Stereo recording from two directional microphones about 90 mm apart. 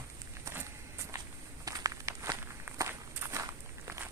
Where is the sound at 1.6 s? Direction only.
35° right (ahead or behind).